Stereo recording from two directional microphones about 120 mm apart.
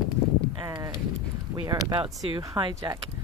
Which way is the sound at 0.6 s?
35° right (ahead or behind).